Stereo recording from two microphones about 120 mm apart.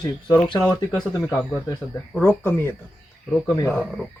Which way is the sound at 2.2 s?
15° left (ahead or behind).